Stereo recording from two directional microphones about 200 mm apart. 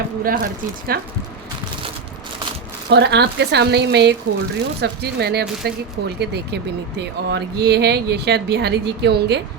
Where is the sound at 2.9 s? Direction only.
55° right (ahead or behind).